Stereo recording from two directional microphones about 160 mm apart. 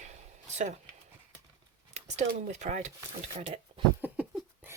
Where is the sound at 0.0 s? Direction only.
45° right (ahead or behind).